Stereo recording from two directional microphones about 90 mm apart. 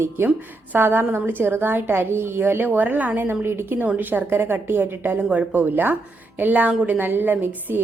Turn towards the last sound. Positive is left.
turn(degrees=-20)  # may be behind; listen again after turning